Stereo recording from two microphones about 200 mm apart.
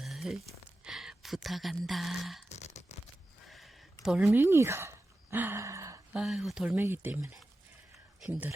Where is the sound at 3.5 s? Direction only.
Centre (ahead or behind).